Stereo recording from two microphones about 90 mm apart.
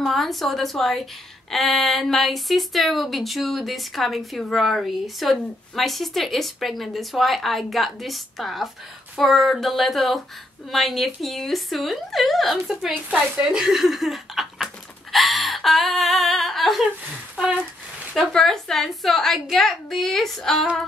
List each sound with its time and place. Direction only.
0.0 s a woman's voice: centre (ahead or behind)
12.9 s a woman's voice: 10° right (ahead or behind)
15.1 s a sound: centre (ahead or behind)
18.1 s a woman's voice: 5° left (ahead or behind)